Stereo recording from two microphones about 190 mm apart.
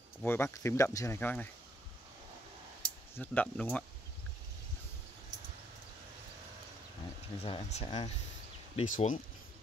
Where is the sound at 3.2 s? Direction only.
10° left (ahead or behind).